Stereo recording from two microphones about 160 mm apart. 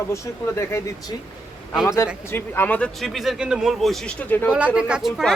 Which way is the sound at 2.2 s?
15° left (ahead or behind).